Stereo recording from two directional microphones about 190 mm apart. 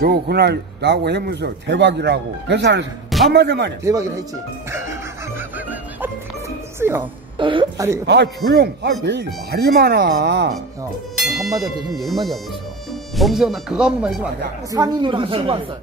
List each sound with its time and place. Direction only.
0.0 s a man's voice: 55° right (ahead or behind)
3.8 s speech: 15° right (ahead or behind)
6.8 s speech: 10° right (ahead or behind)
7.3 s speech: 25° right (ahead or behind)
8.1 s a man's voice: 65° right (ahead or behind)
11.2 s speech: centre (ahead or behind)
14.7 s speech: 20° right (ahead or behind)